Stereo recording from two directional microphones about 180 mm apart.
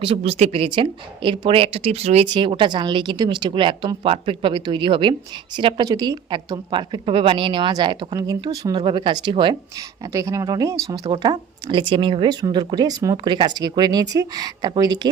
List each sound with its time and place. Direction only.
0.0 s speech: 30° right (ahead or behind)